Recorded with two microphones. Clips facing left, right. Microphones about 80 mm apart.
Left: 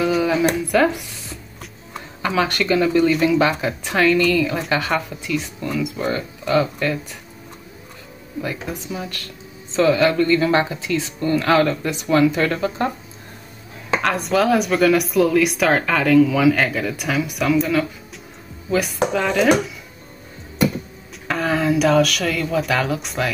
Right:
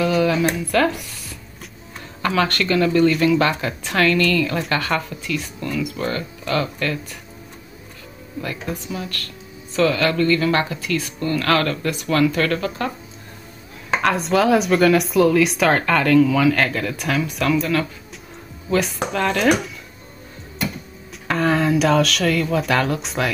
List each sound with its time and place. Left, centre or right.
0.1 s music: centre
2.2 s speech: centre
8.4 s speech: centre
14.0 s speech: centre
21.3 s speech: centre